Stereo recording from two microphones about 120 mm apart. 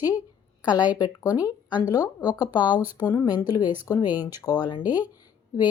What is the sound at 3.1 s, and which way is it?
Speech, 35° left (ahead or behind).